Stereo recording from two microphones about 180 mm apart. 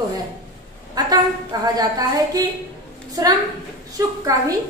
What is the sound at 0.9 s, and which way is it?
A woman's voice, 20° right (ahead or behind).